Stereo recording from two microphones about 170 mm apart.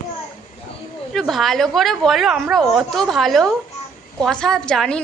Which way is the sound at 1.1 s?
Centre (ahead or behind).